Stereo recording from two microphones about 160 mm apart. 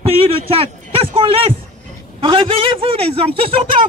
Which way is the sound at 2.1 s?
35° right (ahead or behind).